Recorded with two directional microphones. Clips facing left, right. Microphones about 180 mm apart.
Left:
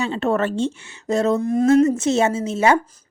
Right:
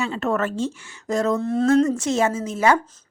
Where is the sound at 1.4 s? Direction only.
15° left (ahead or behind).